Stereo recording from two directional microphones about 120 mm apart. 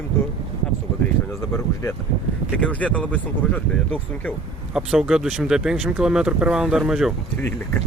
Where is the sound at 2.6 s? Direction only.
10° left (ahead or behind).